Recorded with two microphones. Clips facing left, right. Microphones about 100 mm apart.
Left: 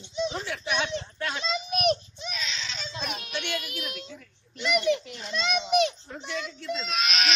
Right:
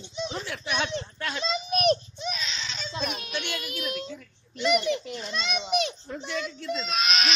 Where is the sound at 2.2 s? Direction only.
25° right (ahead or behind).